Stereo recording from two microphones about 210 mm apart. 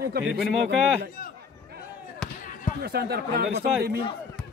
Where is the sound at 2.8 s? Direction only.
50° right (ahead or behind).